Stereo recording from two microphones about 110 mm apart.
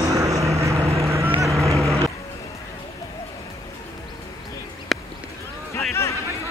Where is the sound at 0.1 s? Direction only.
30° right (ahead or behind).